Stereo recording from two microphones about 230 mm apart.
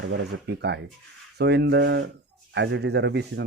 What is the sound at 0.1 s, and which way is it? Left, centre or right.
A man's voice, right.